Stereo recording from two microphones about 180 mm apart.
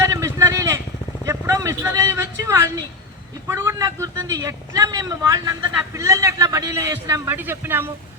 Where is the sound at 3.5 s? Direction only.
15° right (ahead or behind).